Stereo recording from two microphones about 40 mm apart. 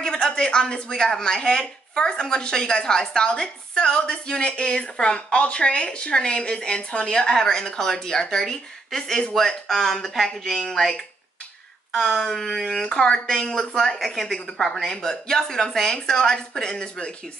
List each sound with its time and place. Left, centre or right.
0.0 s a woman's voice: centre
12.2 s a woman's voice: centre
12.8 s a woman's voice: left